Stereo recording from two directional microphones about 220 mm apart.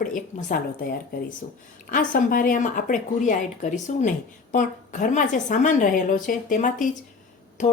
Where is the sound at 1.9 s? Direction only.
35° left (ahead or behind).